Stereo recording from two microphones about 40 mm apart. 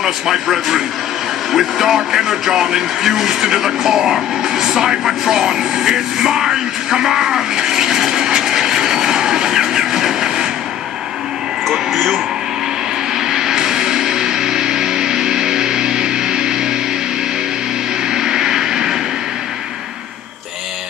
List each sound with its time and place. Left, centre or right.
0.0 s a man's voice: centre
11.6 s speech: centre
13.1 s music: centre
18.0 s vehicle: centre